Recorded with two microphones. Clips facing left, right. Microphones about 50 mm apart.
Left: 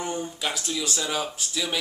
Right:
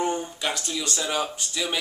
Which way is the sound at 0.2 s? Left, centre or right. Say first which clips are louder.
Right 1 dB; centre.